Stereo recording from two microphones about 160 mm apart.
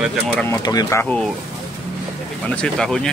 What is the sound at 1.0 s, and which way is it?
Speech, 10° left (ahead or behind).